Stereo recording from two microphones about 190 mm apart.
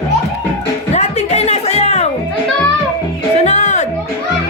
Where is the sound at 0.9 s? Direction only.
35° left (ahead or behind).